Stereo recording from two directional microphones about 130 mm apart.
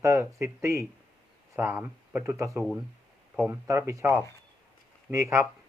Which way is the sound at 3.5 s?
25° right (ahead or behind).